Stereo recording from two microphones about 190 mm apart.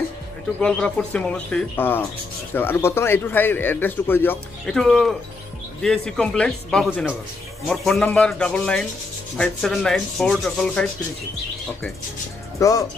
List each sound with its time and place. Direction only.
0.6 s speech: 5° left (ahead or behind)
12.5 s speech: 15° left (ahead or behind)